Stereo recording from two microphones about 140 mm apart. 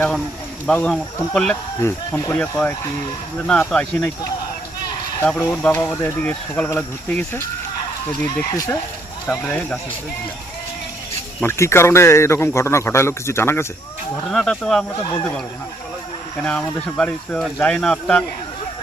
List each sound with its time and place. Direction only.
0.7 s speech: 5° left (ahead or behind)
1.8 s speech: 20° left (ahead or behind)
5.2 s speech: 10° left (ahead or behind)
11.4 s speech: 20° left (ahead or behind)
14.3 s speech: 5° left (ahead or behind)
16.4 s speech: 5° left (ahead or behind)